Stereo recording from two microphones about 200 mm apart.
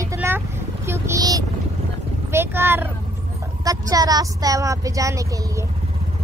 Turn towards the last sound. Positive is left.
turn(degrees=-15)  # may be behind; listen again after turning